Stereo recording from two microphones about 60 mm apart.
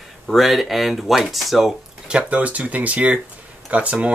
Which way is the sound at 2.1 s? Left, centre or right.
Right.